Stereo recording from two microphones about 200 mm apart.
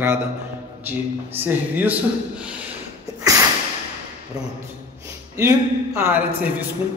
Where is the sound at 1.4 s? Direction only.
10° right (ahead or behind).